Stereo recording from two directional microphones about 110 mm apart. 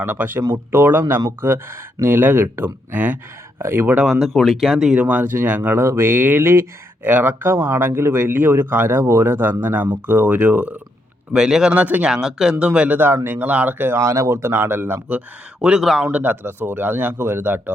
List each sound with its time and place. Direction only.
0.0 s speech: 20° right (ahead or behind)
4.2 s a man's voice: centre (ahead or behind); by 15.2 s 20° right (ahead or behind)
15.6 s a man's voice: 5° right (ahead or behind)
16.1 s speech: 15° right (ahead or behind)